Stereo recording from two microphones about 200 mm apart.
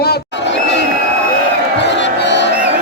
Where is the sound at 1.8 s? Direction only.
60° left (ahead or behind).